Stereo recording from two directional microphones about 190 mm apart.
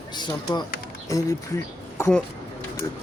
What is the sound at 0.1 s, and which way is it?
Speech, 20° left (ahead or behind).